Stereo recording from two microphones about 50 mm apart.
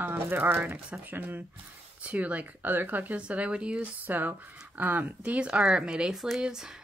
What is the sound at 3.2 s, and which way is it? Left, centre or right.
Speech, right.